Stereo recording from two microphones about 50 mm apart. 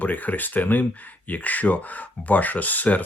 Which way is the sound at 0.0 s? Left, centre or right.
Left.